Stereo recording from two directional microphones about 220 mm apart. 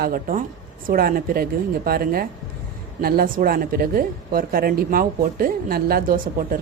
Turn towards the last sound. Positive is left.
turn(degrees=-40)  # may be behind; listen again after turning